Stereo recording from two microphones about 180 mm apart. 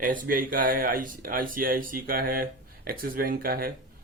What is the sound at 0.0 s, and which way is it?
Speech, 50° right (ahead or behind).